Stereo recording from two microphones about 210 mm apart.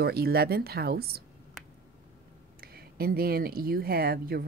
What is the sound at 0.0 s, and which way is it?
Speech, 45° right (ahead or behind).